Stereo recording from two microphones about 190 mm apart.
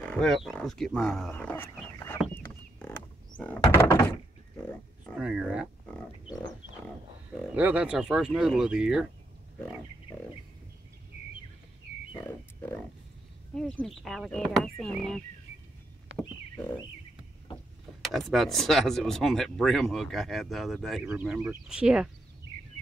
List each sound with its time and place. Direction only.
0.0 s speech: 5° left (ahead or behind)
3.3 s door: 10° left (ahead or behind)
5.1 s speech: 5° right (ahead or behind)
7.5 s speech: 10° right (ahead or behind)
13.6 s a sound: 5° left (ahead or behind)
18.1 s speech: centre (ahead or behind)